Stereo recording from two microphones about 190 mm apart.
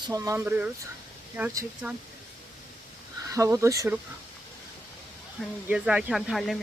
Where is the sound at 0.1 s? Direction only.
15° right (ahead or behind).